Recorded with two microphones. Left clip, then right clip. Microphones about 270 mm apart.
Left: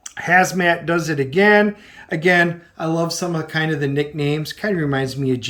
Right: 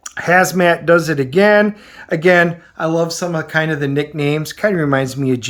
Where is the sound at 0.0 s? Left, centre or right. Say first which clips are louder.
Right 3 dB; centre.